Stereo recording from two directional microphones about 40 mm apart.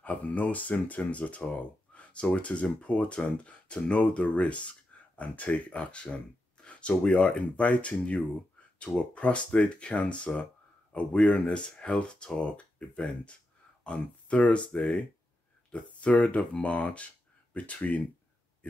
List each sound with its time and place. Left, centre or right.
0.0 s speech: left
7.4 s speech: left